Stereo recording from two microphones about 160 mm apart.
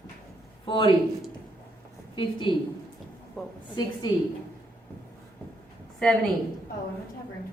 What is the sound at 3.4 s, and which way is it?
Speech, centre (ahead or behind).